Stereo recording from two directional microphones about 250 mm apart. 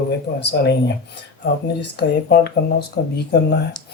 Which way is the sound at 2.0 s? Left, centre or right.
Left.